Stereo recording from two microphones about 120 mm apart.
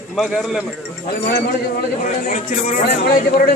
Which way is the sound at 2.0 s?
90° left.